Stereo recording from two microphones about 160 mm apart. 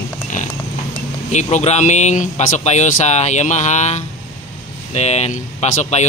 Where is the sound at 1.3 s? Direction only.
45° left (ahead or behind).